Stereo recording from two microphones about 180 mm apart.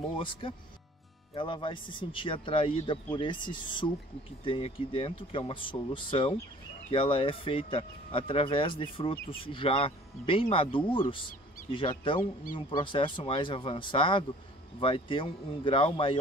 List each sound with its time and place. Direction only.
0.1 s speech: 30° left (ahead or behind)